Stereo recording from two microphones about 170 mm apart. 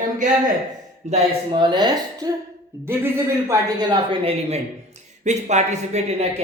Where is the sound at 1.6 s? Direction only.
25° right (ahead or behind).